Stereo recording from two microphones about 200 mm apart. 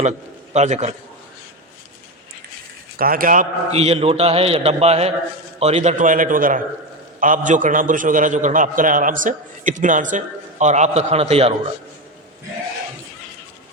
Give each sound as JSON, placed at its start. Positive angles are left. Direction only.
{"t": 0.5, "sound": "a man's voice", "side_deg": -35}
{"t": 3.0, "sound": "a man's voice", "side_deg": -45}